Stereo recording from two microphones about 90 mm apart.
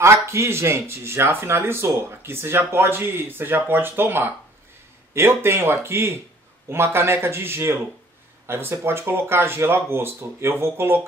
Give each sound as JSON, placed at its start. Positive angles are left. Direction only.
{"t": 0.0, "sound": "speech", "side_deg": -30}